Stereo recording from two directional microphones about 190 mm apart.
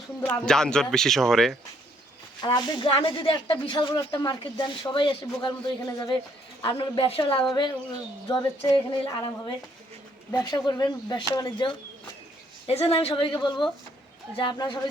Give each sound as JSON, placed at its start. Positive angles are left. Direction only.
{"t": 0.2, "sound": "speech", "side_deg": 10}
{"t": 2.4, "sound": "speech", "side_deg": 25}
{"t": 10.3, "sound": "speech", "side_deg": 20}
{"t": 12.6, "sound": "speech", "side_deg": 30}